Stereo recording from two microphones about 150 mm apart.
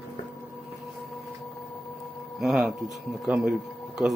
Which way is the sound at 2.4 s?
5° right (ahead or behind).